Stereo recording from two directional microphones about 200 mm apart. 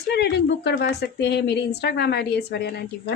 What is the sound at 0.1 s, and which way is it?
Speech, 55° left (ahead or behind).